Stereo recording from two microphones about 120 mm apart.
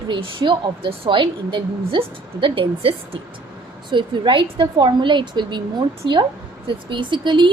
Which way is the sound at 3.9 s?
40° right (ahead or behind).